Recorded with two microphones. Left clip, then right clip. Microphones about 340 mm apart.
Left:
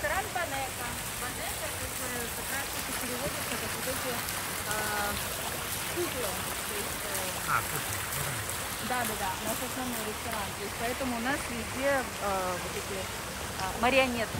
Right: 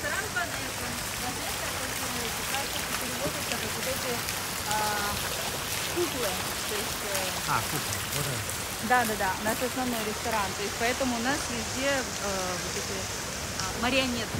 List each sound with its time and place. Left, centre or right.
8.9 s speech: right
13.8 s speech: centre